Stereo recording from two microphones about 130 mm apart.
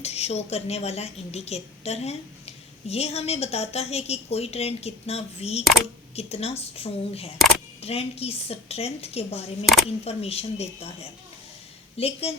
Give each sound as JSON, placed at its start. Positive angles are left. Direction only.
{"t": 0.0, "sound": "a woman's voice", "side_deg": 55}